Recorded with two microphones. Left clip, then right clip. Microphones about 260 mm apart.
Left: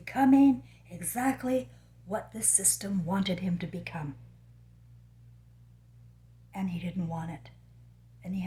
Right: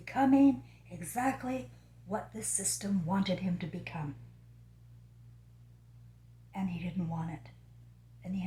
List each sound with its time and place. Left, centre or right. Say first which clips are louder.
0.0 s a woman's voice: left 3 dB; left
6.5 s a woman's voice: left 2 dB; left